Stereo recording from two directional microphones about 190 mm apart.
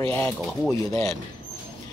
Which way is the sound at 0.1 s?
10° left (ahead or behind).